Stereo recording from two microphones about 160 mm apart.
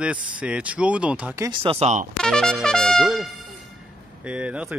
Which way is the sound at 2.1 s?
5° left (ahead or behind).